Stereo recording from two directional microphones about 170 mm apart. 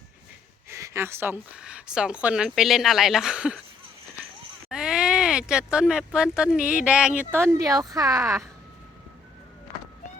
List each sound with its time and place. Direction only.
0.7 s speech: 15° right (ahead or behind)
4.7 s speech: 5° right (ahead or behind)
7.3 s speech: 15° right (ahead or behind)